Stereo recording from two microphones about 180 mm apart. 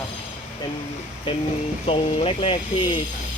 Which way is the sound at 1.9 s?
30° left (ahead or behind).